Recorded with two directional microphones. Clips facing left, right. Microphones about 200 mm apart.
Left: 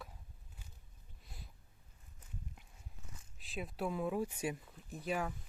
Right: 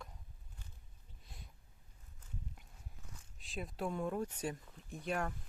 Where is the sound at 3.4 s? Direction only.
Centre (ahead or behind).